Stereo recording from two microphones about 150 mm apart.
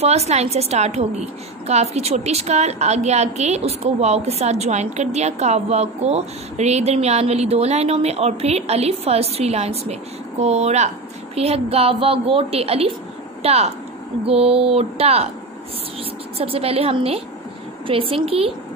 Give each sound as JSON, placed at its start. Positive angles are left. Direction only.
{"t": 0.0, "sound": "a woman's voice", "side_deg": -45}
{"t": 16.3, "sound": "a woman's voice", "side_deg": -40}